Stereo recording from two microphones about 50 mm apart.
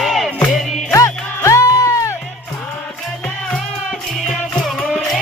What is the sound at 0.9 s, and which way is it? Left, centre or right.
Music, left.